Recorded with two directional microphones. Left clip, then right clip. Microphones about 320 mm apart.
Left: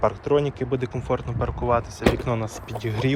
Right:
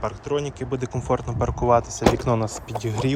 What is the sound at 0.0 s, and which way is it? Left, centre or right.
Speech, centre.